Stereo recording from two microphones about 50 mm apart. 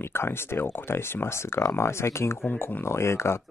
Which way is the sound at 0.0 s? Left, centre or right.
Left.